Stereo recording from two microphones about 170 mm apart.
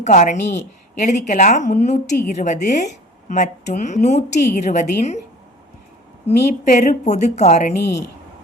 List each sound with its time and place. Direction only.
0.0 s a woman's voice: 45° left (ahead or behind)
6.3 s a woman's voice: 40° left (ahead or behind)
7.7 s a woman's voice: 75° left (ahead or behind)